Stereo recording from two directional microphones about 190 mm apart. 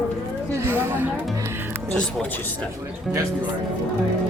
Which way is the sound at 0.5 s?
15° right (ahead or behind).